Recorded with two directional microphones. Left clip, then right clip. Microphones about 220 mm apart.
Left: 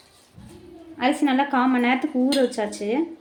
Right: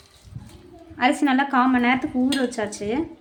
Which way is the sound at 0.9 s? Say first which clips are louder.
Right 1 dB; 10° right (ahead or behind).